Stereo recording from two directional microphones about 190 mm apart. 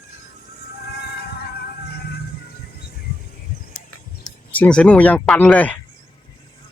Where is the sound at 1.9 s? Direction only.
55° left (ahead or behind).